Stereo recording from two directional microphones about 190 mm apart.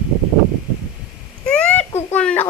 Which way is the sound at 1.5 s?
5° left (ahead or behind).